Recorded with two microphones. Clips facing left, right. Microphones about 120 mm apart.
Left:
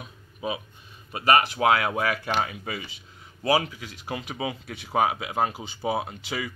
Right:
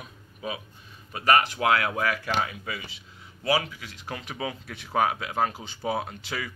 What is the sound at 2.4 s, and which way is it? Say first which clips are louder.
Speech: left 1 dB; 30° left (ahead or behind).